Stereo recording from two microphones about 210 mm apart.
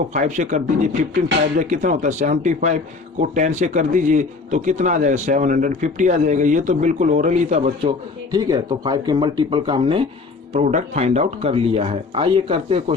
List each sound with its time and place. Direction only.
0.1 s speech: 35° right (ahead or behind)
8.3 s speech: 20° right (ahead or behind)